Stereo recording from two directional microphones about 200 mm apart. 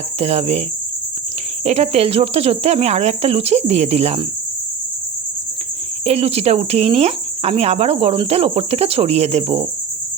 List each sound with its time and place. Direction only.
0.2 s cricket: 30° right (ahead or behind)
1.6 s cricket: 30° right (ahead or behind)
6.1 s cricket: 30° right (ahead or behind)